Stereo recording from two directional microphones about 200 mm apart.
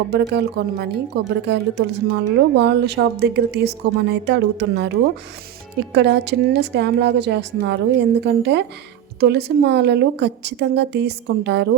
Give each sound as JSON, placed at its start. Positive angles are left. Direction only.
{"t": 0.1, "sound": "speech", "side_deg": -55}